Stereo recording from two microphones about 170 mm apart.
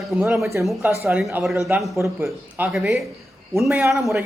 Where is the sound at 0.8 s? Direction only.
10° right (ahead or behind).